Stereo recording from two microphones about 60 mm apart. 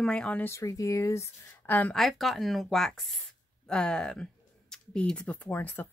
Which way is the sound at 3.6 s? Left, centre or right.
Centre.